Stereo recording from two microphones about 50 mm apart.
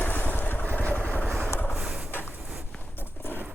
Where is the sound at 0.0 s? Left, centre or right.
Left.